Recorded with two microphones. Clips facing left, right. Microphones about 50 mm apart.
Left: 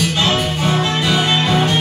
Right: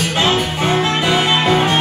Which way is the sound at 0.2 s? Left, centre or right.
Right.